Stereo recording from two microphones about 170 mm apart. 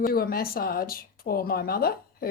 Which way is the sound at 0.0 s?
60° left (ahead or behind).